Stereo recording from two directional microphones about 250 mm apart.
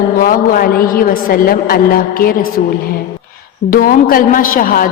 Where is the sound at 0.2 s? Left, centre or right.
Left.